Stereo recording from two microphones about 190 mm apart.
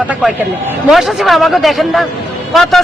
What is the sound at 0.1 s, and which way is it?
A man's voice, centre (ahead or behind).